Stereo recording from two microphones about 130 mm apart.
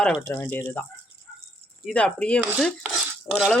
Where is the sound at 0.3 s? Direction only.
15° left (ahead or behind).